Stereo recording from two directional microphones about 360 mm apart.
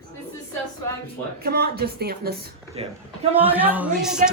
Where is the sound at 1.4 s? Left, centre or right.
Right.